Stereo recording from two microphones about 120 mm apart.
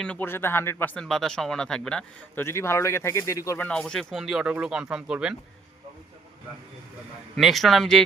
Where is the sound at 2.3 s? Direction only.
20° left (ahead or behind).